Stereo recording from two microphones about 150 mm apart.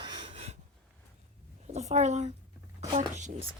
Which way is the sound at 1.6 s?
50° right (ahead or behind).